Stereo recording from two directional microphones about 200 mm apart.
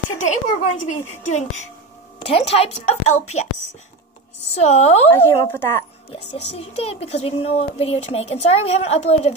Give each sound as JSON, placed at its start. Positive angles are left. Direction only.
{"t": 0.2, "sound": "speech", "side_deg": 35}
{"t": 4.6, "sound": "speech", "side_deg": 35}
{"t": 5.1, "sound": "a woman's voice", "side_deg": 10}
{"t": 6.1, "sound": "speech", "side_deg": 30}